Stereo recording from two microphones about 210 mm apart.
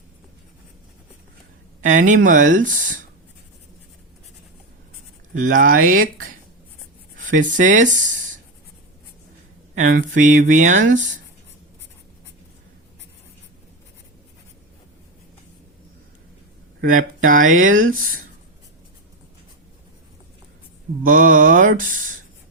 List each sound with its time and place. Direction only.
1.8 s speech: 35° right (ahead or behind)
5.4 s speech: 40° right (ahead or behind)
7.2 s speech: 40° right (ahead or behind)
9.7 s speech: 40° right (ahead or behind)
17.2 s speech: 40° right (ahead or behind)
21.0 s speech: 40° right (ahead or behind)